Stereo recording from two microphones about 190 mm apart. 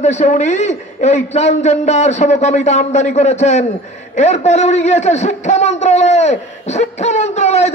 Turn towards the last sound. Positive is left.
turn(degrees=35)  # may be behind; listen again after turning